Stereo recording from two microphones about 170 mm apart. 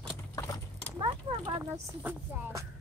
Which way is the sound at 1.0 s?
25° right (ahead or behind).